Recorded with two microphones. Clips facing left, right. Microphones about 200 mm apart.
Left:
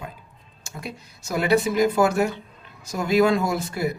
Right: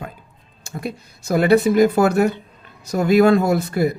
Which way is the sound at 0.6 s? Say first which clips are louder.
Right 7 dB; 55° right (ahead or behind).